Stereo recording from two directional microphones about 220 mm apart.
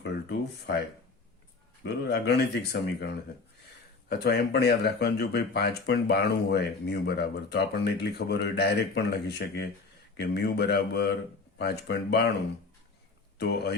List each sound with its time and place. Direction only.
0.0 s speech: 45° left (ahead or behind)
1.8 s speech: 50° left (ahead or behind)
4.1 s speech: 45° left (ahead or behind)
13.4 s speech: 50° left (ahead or behind)